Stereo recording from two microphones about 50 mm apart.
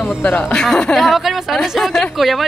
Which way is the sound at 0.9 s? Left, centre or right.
Centre.